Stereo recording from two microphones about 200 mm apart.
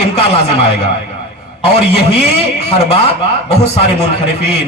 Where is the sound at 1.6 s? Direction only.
30° left (ahead or behind).